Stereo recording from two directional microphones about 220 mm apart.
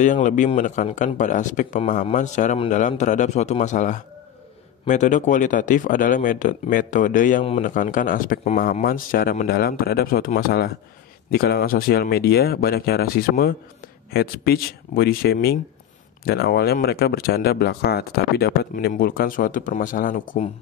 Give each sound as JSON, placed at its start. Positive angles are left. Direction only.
{"t": 0.0, "sound": "speech", "side_deg": 35}